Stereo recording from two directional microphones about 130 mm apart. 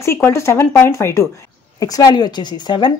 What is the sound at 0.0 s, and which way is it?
A woman's voice, 20° left (ahead or behind).